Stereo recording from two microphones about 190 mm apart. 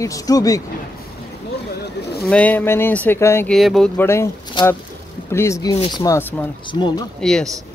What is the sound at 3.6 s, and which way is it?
Speech, centre (ahead or behind).